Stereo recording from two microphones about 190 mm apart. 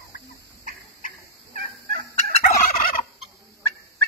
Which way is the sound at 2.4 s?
45° left (ahead or behind).